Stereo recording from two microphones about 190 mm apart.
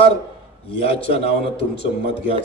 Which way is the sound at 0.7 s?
30° left (ahead or behind).